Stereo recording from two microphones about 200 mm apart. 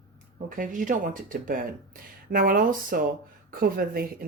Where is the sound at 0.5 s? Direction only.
40° right (ahead or behind).